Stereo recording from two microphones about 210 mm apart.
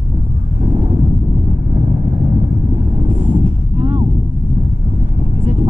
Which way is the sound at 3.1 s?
25° right (ahead or behind).